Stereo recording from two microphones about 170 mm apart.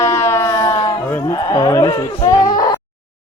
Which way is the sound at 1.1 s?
10° left (ahead or behind).